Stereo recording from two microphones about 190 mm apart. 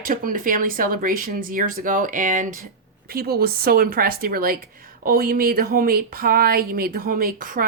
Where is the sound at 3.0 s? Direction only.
55° right (ahead or behind).